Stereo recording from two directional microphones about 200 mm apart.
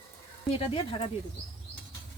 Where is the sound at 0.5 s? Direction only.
25° left (ahead or behind).